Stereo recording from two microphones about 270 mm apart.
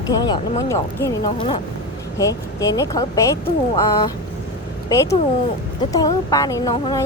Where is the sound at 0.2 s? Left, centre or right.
Centre.